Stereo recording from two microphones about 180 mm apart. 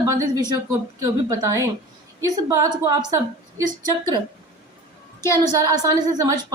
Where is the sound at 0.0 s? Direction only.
20° right (ahead or behind).